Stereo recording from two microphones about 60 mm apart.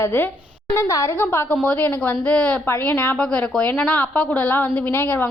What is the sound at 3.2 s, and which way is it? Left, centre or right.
A woman's voice, centre.